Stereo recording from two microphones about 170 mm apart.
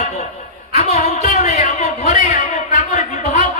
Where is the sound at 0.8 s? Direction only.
40° left (ahead or behind).